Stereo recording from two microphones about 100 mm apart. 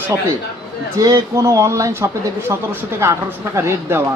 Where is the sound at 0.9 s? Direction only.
35° right (ahead or behind).